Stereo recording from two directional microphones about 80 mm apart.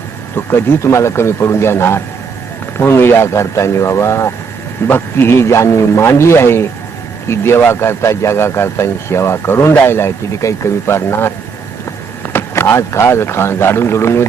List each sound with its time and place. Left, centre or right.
0.3 s speech: left